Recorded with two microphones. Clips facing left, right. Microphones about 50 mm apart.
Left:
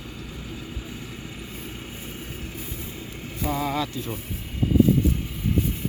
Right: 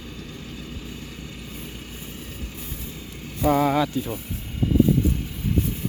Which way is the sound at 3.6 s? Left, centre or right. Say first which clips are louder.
Right 5 dB; centre.